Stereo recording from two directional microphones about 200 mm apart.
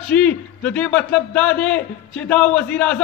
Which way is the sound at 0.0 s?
5° left (ahead or behind).